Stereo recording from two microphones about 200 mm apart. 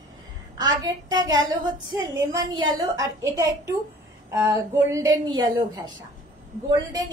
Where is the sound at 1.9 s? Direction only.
20° right (ahead or behind).